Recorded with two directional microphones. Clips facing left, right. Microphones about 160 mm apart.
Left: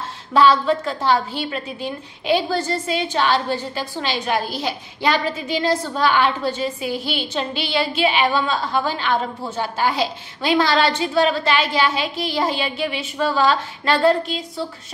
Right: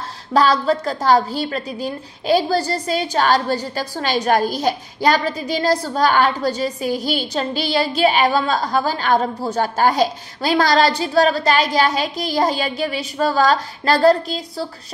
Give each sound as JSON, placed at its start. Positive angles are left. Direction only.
{"t": 0.3, "sound": "a woman's voice", "side_deg": -40}